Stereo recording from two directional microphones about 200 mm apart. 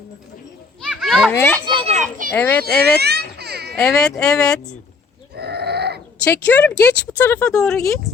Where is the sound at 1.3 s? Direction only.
10° left (ahead or behind).